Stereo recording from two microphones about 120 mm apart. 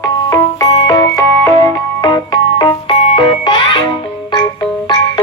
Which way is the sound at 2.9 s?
50° left (ahead or behind).